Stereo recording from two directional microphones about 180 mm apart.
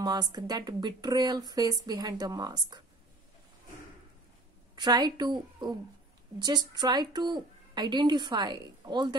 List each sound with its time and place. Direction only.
0.0 s speech: 20° right (ahead or behind)
4.7 s speech: 25° right (ahead or behind)